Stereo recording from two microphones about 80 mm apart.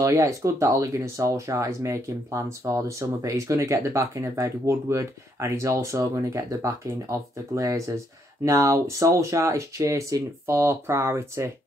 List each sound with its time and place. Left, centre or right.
0.0 s speech: right